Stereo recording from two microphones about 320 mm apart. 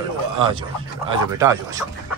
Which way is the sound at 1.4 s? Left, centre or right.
Centre.